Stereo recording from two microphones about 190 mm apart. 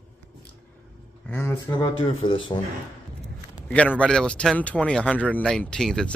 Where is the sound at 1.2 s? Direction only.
10° left (ahead or behind).